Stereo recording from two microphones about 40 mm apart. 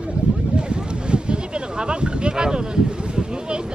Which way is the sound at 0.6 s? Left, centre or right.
Right.